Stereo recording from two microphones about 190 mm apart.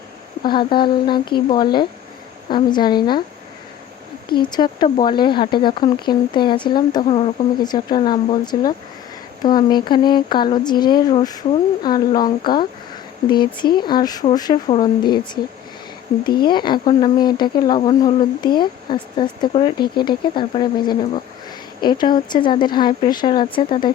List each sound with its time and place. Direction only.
0.4 s speech: 25° left (ahead or behind)
4.3 s speech: 25° left (ahead or behind)
16.2 s speech: 25° left (ahead or behind)